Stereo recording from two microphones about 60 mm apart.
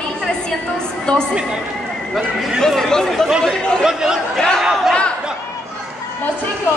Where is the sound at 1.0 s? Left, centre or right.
Centre.